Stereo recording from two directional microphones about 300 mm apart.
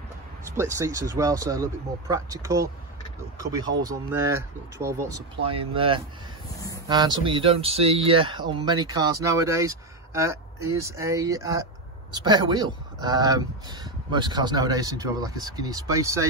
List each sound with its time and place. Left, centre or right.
0.5 s speech: centre
3.8 s speech: centre
5.5 s speech: centre